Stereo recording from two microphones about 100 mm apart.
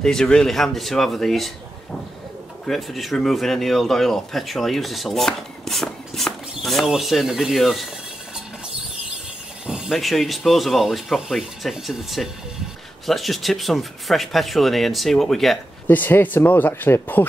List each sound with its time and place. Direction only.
0.0 s speech: 5° left (ahead or behind)
9.7 s speech: 5° right (ahead or behind)
15.9 s speech: 20° left (ahead or behind)